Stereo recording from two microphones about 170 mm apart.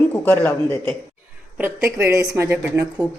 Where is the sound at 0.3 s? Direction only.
10° left (ahead or behind).